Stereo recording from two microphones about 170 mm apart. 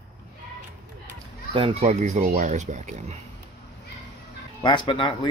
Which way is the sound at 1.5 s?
35° right (ahead or behind).